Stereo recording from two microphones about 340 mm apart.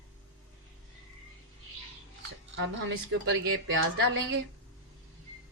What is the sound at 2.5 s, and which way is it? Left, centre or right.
A woman's voice, right.